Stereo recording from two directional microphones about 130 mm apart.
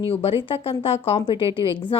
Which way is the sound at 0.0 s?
45° left (ahead or behind).